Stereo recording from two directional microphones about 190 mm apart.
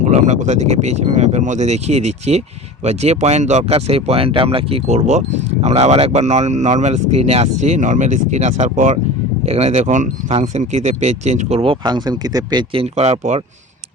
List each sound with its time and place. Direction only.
0.1 s speech: 35° right (ahead or behind)